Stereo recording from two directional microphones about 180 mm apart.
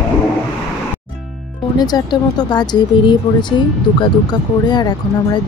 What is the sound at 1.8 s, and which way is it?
Speech, 25° left (ahead or behind).